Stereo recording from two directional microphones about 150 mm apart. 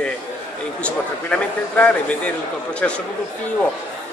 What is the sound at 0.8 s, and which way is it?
A man's voice, 10° left (ahead or behind).